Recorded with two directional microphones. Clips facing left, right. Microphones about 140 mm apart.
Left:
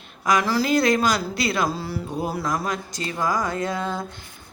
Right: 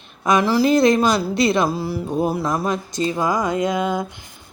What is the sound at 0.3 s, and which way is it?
A woman's voice, 20° right (ahead or behind).